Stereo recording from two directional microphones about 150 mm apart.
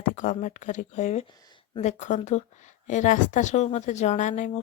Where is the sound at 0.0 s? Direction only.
55° left (ahead or behind).